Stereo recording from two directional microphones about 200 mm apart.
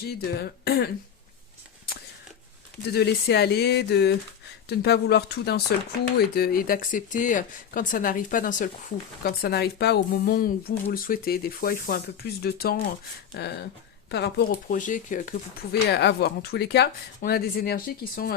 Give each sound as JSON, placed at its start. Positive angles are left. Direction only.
{"t": 0.0, "sound": "speech", "side_deg": 55}
{"t": 2.8, "sound": "speech", "side_deg": 55}
{"t": 9.2, "sound": "speech", "side_deg": 55}